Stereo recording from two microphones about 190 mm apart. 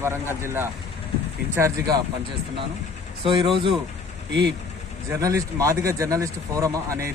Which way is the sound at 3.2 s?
25° right (ahead or behind).